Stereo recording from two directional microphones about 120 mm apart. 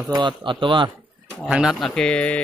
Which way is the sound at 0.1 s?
40° right (ahead or behind).